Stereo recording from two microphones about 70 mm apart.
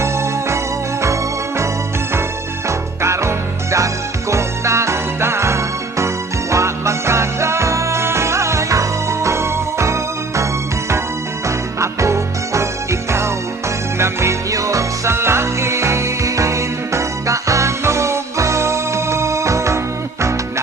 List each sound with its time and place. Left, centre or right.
0.0 s music: right
15.1 s music: right